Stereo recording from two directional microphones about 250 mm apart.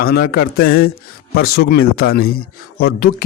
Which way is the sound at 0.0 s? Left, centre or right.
Left.